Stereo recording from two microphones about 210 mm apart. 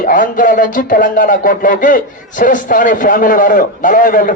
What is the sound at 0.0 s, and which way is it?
Speech, 40° left (ahead or behind).